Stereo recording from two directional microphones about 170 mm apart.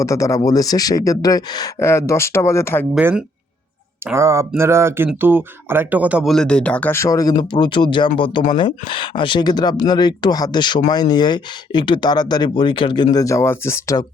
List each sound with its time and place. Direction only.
0.0 s speech: 20° left (ahead or behind)
2.9 s speech: 10° right (ahead or behind); by 14.0 s 15° left (ahead or behind)